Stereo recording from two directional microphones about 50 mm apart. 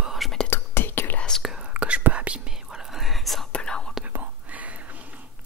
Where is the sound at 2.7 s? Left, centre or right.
Centre.